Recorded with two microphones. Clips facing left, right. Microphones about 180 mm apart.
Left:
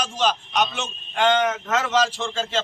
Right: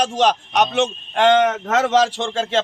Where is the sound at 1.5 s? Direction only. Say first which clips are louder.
Right 5 dB; 40° right (ahead or behind).